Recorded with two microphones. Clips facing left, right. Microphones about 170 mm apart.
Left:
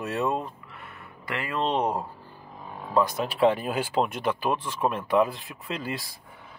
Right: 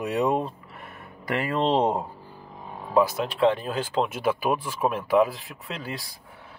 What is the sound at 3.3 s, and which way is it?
Speech, 5° left (ahead or behind).